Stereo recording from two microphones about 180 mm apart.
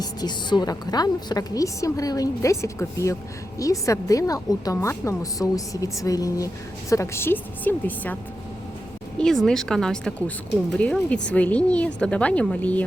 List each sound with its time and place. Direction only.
0.0 s a woman's voice: 25° left (ahead or behind); by 12.8 s 5° left (ahead or behind)